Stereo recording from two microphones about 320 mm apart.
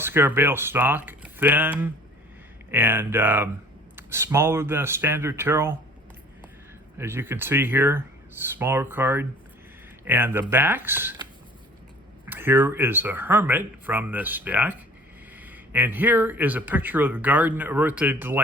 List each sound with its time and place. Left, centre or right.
0.0 s speech: centre
7.0 s speech: centre